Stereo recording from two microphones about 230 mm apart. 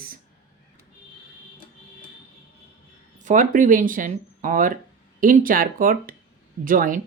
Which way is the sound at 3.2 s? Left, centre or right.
Right.